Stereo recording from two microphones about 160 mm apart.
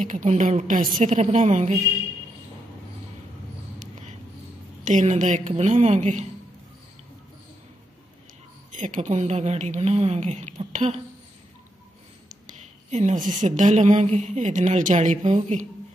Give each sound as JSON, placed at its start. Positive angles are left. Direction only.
{"t": 0.0, "sound": "speech", "side_deg": -55}
{"t": 4.8, "sound": "speech", "side_deg": -50}
{"t": 8.7, "sound": "speech", "side_deg": -50}
{"t": 12.3, "sound": "whispering", "side_deg": -50}
{"t": 13.4, "sound": "speech", "side_deg": -50}